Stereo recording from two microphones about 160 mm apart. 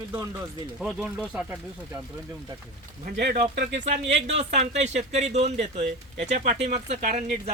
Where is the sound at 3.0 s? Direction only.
65° right (ahead or behind); by 3.8 s 85° right.